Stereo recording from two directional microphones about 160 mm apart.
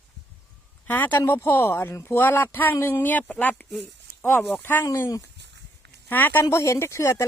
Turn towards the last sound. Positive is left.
turn(degrees=20)  # may be behind; listen again after turning